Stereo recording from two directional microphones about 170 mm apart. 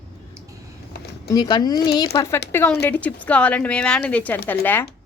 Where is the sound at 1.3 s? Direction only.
25° left (ahead or behind).